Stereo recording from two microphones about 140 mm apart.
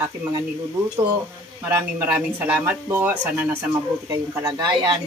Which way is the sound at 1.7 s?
20° right (ahead or behind).